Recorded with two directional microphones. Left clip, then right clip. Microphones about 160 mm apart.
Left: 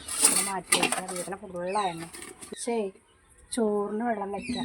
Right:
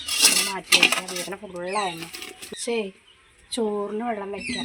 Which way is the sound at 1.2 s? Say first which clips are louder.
Right 2 dB; 10° right (ahead or behind).